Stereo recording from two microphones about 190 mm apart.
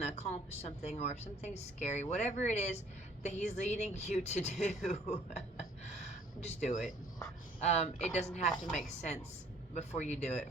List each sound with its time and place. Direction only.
0.0 s a woman's voice: 35° left (ahead or behind)
6.4 s a woman's voice: 35° left (ahead or behind)
9.7 s a woman's voice: 35° left (ahead or behind)